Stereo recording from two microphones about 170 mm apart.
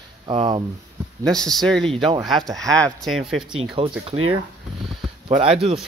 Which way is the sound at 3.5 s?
30° right (ahead or behind).